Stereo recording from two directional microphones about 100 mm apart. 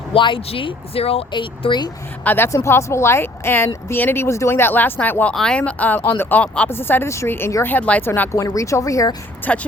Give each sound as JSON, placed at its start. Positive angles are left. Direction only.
{"t": 0.1, "sound": "speech", "side_deg": 60}
{"t": 1.3, "sound": "speech", "side_deg": 55}
{"t": 2.2, "sound": "speech", "side_deg": 20}
{"t": 8.3, "sound": "a woman's voice", "side_deg": 30}
{"t": 9.5, "sound": "speech", "side_deg": 15}